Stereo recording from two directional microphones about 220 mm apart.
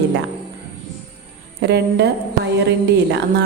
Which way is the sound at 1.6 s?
50° right (ahead or behind).